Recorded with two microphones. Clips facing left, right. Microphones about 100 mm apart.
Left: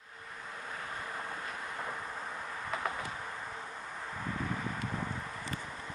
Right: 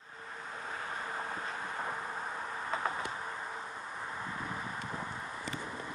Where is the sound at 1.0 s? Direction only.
30° right (ahead or behind).